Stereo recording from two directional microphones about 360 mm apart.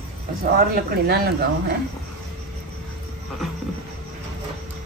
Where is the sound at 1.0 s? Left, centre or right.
Right.